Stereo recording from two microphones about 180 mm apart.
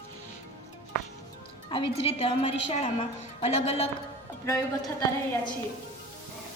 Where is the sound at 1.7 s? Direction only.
30° left (ahead or behind).